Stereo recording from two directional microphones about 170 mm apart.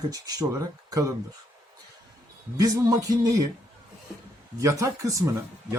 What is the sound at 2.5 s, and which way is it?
Speech, 20° right (ahead or behind).